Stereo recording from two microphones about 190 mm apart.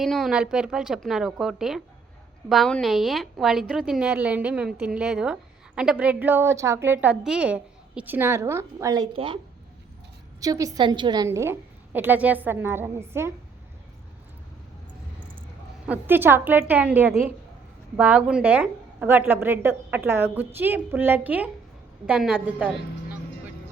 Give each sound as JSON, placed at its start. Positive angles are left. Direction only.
{"t": 0.0, "sound": "a woman's voice", "side_deg": 0}
{"t": 10.4, "sound": "a woman's voice", "side_deg": -20}
{"t": 15.9, "sound": "a woman's voice", "side_deg": -10}